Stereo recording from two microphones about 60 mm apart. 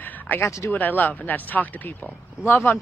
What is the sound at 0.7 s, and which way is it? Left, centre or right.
Speech, left.